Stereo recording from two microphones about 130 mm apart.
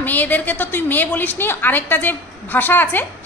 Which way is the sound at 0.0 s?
15° left (ahead or behind).